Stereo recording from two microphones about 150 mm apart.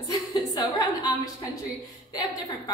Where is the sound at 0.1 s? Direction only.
25° left (ahead or behind).